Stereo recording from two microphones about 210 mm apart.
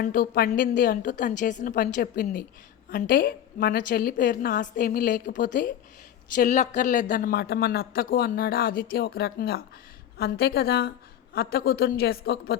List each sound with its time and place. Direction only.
0.0 s a woman's voice: 45° left (ahead or behind)